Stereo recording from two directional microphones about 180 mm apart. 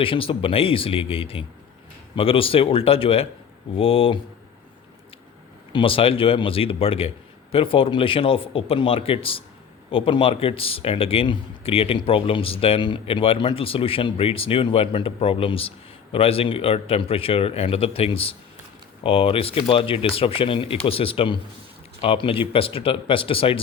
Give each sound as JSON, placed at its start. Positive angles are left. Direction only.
{"t": 0.0, "sound": "speech", "side_deg": 30}
{"t": 5.7, "sound": "speech", "side_deg": 30}